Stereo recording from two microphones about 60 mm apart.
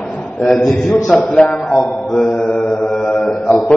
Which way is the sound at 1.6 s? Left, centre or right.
Centre.